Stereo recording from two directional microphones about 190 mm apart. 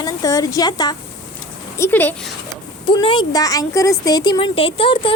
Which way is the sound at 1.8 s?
10° left (ahead or behind).